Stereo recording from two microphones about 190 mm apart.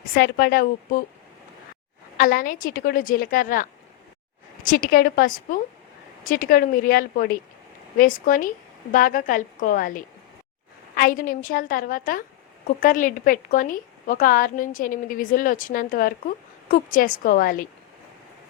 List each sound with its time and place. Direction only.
0.1 s speech: 55° left (ahead or behind)
2.1 s speech: 50° left (ahead or behind)